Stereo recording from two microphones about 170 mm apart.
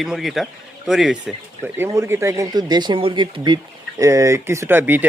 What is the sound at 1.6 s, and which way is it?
Speech, 15° right (ahead or behind).